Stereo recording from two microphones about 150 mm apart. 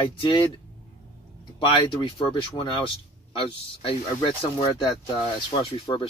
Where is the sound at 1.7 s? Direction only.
35° left (ahead or behind).